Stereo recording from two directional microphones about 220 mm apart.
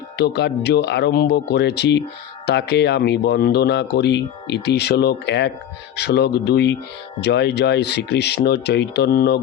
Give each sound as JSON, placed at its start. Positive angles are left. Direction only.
{"t": 0.2, "sound": "speech", "side_deg": 50}